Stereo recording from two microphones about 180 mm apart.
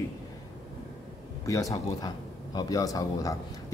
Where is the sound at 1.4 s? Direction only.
20° left (ahead or behind).